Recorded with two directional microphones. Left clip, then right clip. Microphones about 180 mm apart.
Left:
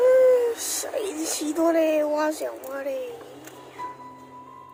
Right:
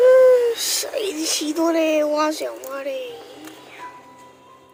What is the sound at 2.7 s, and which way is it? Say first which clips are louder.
Speech: right 2 dB; 5° left (ahead or behind).